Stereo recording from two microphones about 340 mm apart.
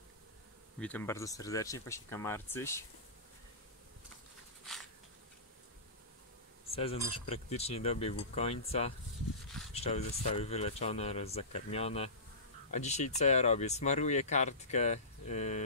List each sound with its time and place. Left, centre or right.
0.7 s speech: centre
6.7 s speech: centre